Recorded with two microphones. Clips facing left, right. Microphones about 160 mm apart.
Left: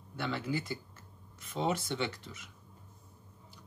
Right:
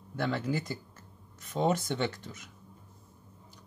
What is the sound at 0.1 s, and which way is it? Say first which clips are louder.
Speech: right 4 dB; 45° right (ahead or behind).